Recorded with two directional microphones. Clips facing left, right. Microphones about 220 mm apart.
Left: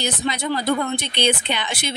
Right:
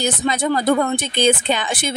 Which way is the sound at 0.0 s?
45° right (ahead or behind).